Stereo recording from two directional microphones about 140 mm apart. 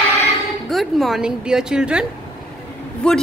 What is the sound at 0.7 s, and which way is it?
Speech, centre (ahead or behind).